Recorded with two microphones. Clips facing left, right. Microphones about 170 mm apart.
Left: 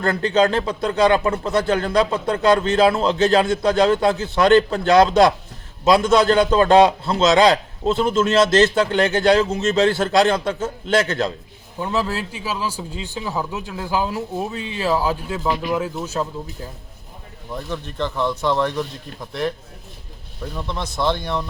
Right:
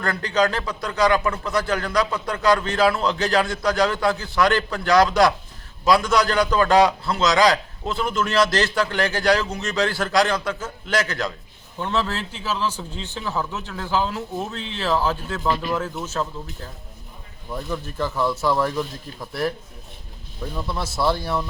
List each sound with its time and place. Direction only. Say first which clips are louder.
0.0 s a man's voice: left 4 dB; 25° left (ahead or behind)
11.8 s a man's voice: left 2 dB; 10° left (ahead or behind)
17.5 s speech: even; 5° right (ahead or behind)
20.6 s speech: even; 5° right (ahead or behind)